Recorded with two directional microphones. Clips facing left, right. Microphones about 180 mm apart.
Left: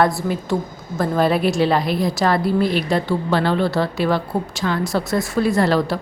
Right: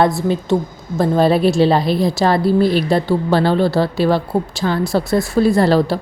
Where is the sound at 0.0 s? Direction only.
25° right (ahead or behind).